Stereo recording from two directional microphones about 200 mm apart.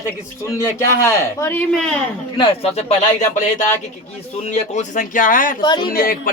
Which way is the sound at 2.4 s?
30° left (ahead or behind).